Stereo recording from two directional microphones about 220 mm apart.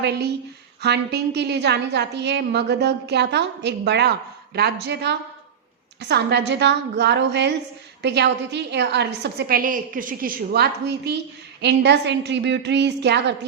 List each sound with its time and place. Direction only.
0.8 s a woman's voice: 50° right (ahead or behind)